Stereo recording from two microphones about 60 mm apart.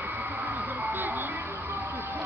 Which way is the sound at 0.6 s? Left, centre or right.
Right.